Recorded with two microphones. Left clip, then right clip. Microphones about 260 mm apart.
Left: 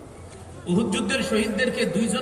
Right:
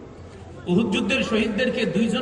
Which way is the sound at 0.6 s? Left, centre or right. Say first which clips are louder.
Right 2 dB; left.